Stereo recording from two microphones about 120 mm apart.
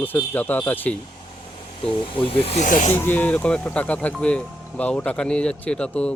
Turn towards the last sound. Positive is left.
turn(degrees=10)  # may be behind; listen again after turning